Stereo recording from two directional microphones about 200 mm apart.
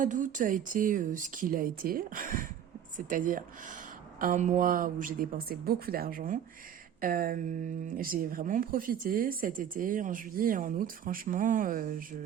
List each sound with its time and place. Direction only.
0.0 s speech: 40° right (ahead or behind)